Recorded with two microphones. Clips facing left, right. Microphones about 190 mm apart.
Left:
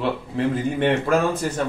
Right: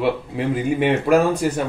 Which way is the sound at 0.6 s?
10° right (ahead or behind).